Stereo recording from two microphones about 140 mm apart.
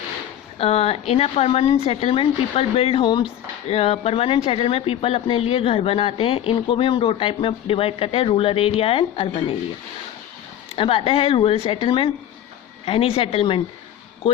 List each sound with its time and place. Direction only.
0.6 s speech: 45° left (ahead or behind)
10.8 s speech: 40° left (ahead or behind)